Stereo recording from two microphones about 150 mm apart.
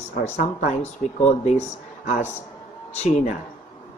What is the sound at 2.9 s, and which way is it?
Speech, 50° left (ahead or behind).